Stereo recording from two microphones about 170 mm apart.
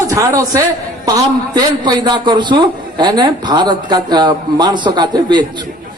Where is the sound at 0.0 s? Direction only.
20° right (ahead or behind).